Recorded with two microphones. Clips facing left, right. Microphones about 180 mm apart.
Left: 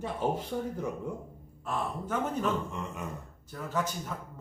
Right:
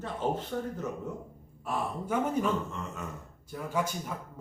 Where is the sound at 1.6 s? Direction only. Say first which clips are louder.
Right 1 dB; 10° right (ahead or behind).